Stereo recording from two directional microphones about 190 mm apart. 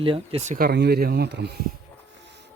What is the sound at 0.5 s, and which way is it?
Speech, 55° right (ahead or behind).